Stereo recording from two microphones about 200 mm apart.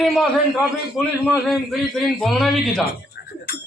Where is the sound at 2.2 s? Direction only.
Centre (ahead or behind).